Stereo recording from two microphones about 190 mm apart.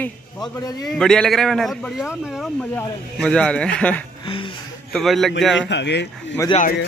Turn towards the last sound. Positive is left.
turn(degrees=20)  # may be behind; listen again after turning